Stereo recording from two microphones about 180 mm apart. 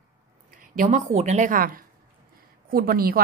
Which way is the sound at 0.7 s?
40° right (ahead or behind).